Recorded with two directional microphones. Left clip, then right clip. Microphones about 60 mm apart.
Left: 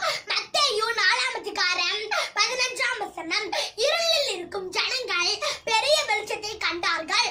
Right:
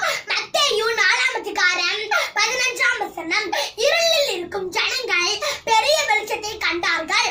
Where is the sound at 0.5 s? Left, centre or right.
Centre.